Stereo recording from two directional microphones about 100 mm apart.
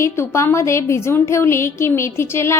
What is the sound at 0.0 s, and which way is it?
A woman's voice, 25° left (ahead or behind).